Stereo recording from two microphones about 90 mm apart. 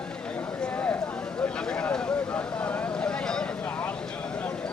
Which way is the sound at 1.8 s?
15° left (ahead or behind).